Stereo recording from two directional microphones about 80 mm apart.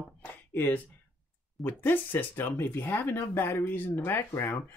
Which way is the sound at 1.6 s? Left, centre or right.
Left.